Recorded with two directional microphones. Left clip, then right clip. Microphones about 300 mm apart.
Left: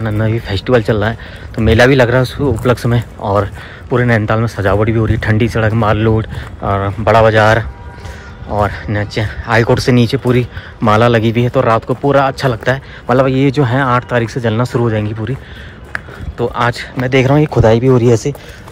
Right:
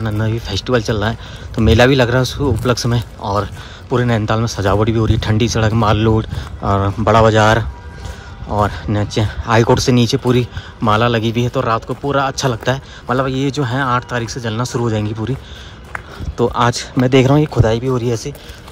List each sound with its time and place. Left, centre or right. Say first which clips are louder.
0.0 s speech: left 4 dB; centre
16.3 s speech: even; centre